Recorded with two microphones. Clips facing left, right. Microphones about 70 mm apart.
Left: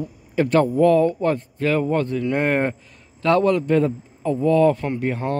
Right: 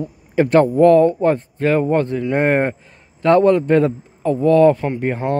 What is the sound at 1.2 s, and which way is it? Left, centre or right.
Speech, right.